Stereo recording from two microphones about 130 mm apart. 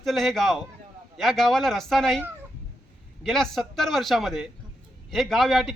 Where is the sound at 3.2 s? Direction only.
5° left (ahead or behind).